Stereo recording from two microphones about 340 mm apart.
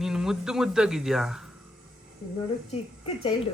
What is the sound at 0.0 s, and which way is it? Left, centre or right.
A woman's voice, centre.